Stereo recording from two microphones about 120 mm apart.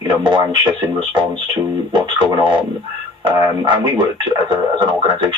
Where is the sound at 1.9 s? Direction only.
40° right (ahead or behind).